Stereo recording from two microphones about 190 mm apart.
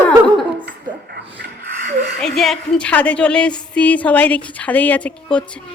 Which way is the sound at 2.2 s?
Centre (ahead or behind).